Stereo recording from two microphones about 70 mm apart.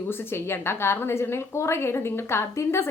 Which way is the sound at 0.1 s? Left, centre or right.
Left.